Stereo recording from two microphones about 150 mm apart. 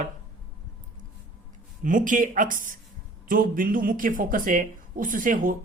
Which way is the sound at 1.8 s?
60° right (ahead or behind).